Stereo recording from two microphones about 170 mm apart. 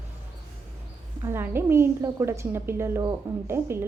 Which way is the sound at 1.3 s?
15° right (ahead or behind).